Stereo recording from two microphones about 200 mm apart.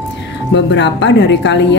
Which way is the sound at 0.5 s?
60° left (ahead or behind).